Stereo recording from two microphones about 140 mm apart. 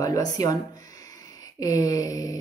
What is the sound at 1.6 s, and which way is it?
Speech, 25° left (ahead or behind).